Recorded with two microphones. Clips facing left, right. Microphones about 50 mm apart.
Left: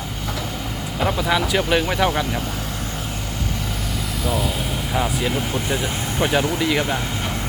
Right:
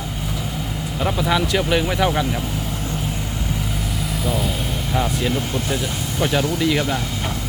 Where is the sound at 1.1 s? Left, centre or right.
Centre.